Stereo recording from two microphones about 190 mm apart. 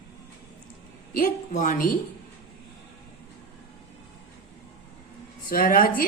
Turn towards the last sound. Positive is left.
turn(degrees=50)  # may be behind; listen again after turning